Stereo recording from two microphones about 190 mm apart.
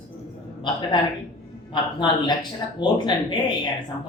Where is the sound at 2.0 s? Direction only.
20° left (ahead or behind).